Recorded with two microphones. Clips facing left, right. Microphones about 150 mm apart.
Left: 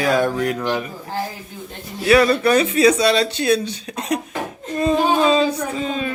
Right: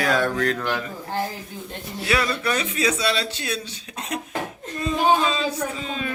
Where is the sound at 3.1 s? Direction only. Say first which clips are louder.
Left 10 dB; 40° left (ahead or behind).